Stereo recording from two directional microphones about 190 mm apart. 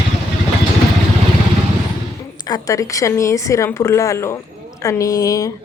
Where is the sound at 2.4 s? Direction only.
20° left (ahead or behind).